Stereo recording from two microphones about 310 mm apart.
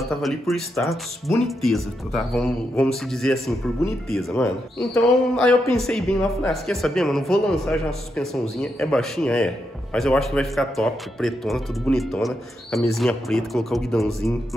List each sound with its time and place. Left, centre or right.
0.0 s a man's voice: centre